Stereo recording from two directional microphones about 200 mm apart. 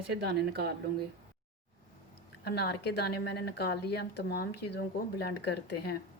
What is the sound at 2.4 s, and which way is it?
A woman's voice, 55° left (ahead or behind).